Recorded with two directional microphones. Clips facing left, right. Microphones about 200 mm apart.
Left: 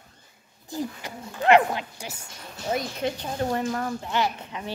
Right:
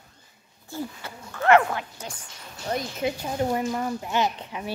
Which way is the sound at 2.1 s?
5° left (ahead or behind).